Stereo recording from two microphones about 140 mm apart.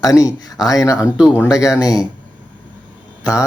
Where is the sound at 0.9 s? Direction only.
5° right (ahead or behind).